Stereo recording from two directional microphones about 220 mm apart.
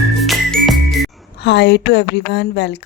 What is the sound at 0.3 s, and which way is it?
Music, centre (ahead or behind).